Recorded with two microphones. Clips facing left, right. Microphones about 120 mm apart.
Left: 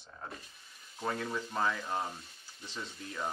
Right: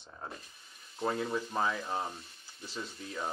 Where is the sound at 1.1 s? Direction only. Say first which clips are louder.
Right 3 dB; 25° right (ahead or behind).